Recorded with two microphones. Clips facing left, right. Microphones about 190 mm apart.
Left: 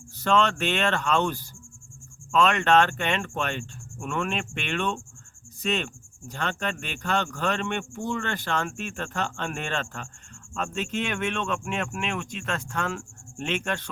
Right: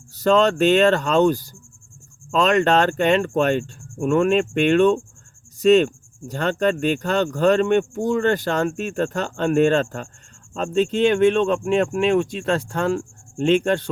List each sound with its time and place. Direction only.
0.2 s speech: 40° right (ahead or behind)